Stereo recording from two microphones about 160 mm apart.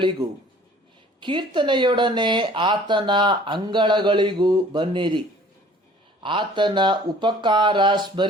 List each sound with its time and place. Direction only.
0.0 s speech: 30° right (ahead or behind)
6.2 s speech: 30° right (ahead or behind)